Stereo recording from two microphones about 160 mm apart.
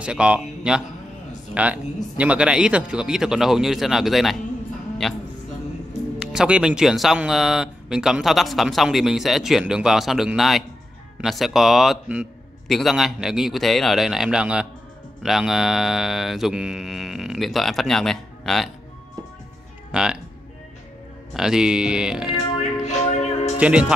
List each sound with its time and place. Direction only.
0.0 s speech: 5° right (ahead or behind)
19.9 s speech: 5° right (ahead or behind)
21.3 s speech: 5° right (ahead or behind)
22.6 s music: 45° left (ahead or behind)
23.6 s speech: 5° right (ahead or behind)